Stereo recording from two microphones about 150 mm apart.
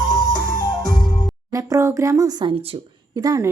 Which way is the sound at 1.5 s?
20° right (ahead or behind).